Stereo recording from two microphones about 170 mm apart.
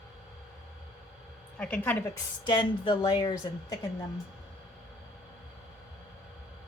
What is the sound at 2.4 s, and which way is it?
Speech, 25° left (ahead or behind).